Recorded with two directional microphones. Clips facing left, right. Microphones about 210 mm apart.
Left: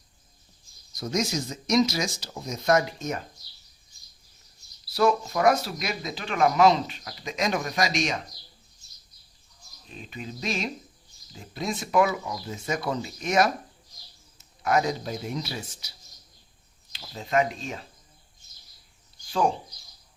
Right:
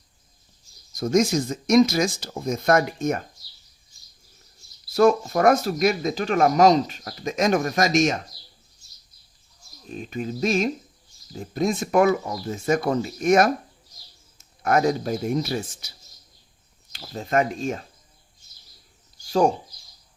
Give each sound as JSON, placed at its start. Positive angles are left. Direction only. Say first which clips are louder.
{"t": 0.9, "sound": "speech", "louder": "right 8 dB", "side_deg": -50}
{"t": 4.9, "sound": "speech", "louder": "right 5 dB", "side_deg": -45}
{"t": 9.9, "sound": "speech", "louder": "right 9 dB", "side_deg": -45}
{"t": 14.6, "sound": "speech", "louder": "right 4 dB", "side_deg": -50}
{"t": 16.9, "sound": "speech", "louder": "right 3 dB", "side_deg": -50}
{"t": 19.2, "sound": "speech", "louder": "right 5 dB", "side_deg": -40}